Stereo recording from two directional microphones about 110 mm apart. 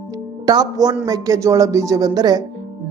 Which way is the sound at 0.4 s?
35° right (ahead or behind).